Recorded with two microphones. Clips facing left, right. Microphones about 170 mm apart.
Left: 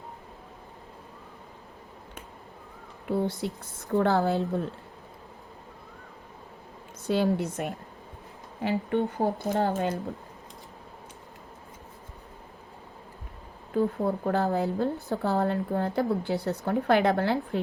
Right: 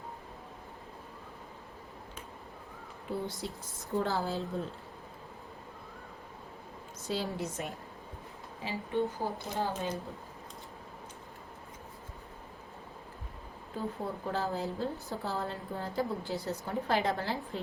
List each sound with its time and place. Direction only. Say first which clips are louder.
3.1 s a woman's voice: left 8 dB; 60° left (ahead or behind)
7.1 s a woman's voice: left 9 dB; 60° left (ahead or behind)
13.7 s a woman's voice: left 11 dB; 60° left (ahead or behind)